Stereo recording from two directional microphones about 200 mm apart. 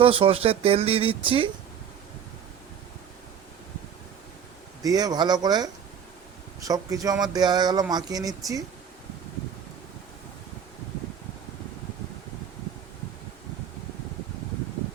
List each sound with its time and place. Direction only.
0.0 s speech: 25° right (ahead or behind)
4.8 s speech: 20° right (ahead or behind)